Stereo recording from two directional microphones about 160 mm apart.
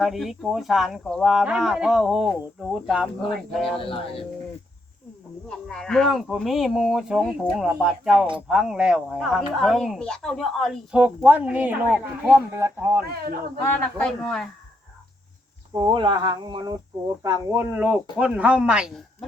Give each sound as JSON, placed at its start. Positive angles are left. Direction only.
{"t": 0.0, "sound": "speech", "side_deg": 0}
{"t": 3.8, "sound": "speech", "side_deg": 35}
{"t": 5.5, "sound": "speech", "side_deg": 5}
{"t": 13.6, "sound": "speech", "side_deg": 15}
{"t": 14.1, "sound": "speech", "side_deg": 0}
{"t": 15.7, "sound": "speech", "side_deg": -30}
{"t": 17.5, "sound": "speech", "side_deg": -15}